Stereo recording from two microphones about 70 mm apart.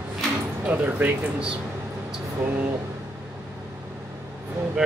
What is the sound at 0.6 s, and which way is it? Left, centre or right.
Speech, centre.